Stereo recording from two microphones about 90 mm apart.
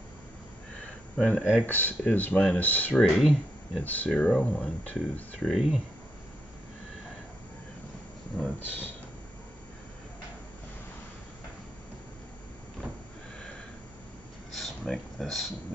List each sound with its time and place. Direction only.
1.1 s speech: 10° left (ahead or behind)
1.7 s speech: 20° left (ahead or behind)
2.9 s speech: centre (ahead or behind)
3.8 s speech: 20° left (ahead or behind)
5.5 s speech: 5° right (ahead or behind)
8.4 s speech: 20° left (ahead or behind)
14.6 s a sound: centre (ahead or behind)